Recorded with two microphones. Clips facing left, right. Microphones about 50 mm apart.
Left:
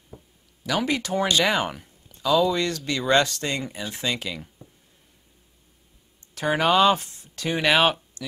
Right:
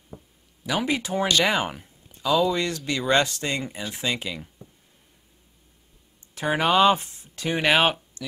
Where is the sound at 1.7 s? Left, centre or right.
Centre.